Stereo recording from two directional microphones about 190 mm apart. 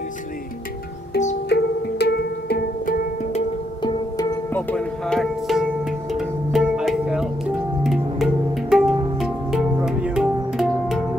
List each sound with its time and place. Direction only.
1.5 s music: 65° left (ahead or behind)
3.3 s music: 20° left (ahead or behind)
4.6 s music: 5° left (ahead or behind)